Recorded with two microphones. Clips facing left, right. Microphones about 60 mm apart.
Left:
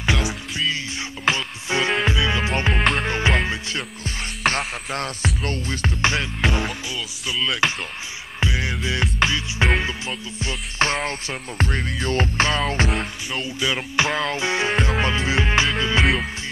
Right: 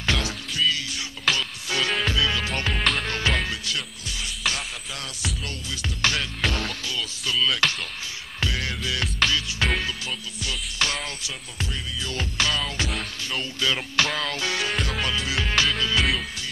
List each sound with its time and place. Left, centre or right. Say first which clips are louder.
0.0 s music: left 3 dB; centre
2.8 s music: left 3 dB; centre
3.1 s music: left 4 dB; left
4.4 s music: left 8 dB; left
6.0 s music: left 3 dB; left
8.4 s music: left 4 dB; left
12.9 s music: left 4 dB; centre; by 16.1 s left